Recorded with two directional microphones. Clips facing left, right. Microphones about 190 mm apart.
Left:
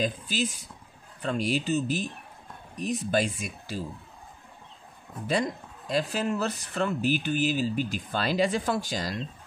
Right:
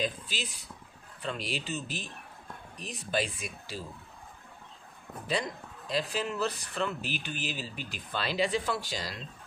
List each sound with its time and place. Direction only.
0.0 s speech: 45° left (ahead or behind)
5.9 s speech: 45° left (ahead or behind)